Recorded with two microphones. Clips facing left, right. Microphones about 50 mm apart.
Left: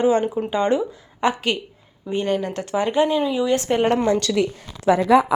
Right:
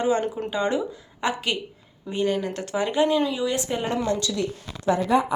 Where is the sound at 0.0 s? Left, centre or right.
Left.